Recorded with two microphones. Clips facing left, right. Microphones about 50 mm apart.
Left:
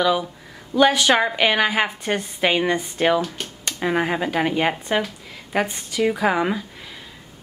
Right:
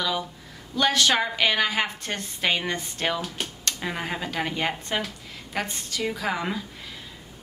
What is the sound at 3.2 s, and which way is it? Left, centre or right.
Speech, centre.